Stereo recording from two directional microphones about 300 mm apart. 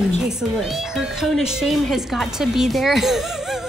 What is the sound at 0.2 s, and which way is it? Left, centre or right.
A woman's voice, centre.